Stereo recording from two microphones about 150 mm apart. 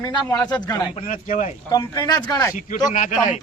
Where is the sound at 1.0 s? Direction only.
60° left (ahead or behind).